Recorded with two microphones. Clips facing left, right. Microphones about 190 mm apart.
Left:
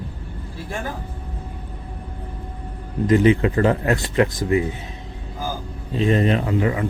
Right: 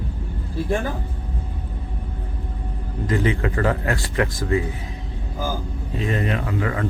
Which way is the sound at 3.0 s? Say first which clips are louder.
Left 6 dB; 20° left (ahead or behind).